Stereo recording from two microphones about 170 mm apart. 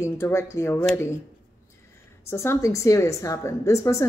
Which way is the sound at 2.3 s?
15° left (ahead or behind).